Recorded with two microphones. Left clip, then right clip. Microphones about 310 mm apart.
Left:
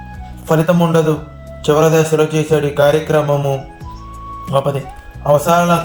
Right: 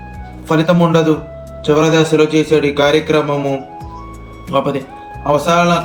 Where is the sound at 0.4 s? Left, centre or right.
Left.